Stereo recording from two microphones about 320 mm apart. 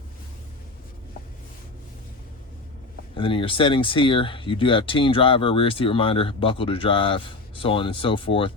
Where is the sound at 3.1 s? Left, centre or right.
Centre.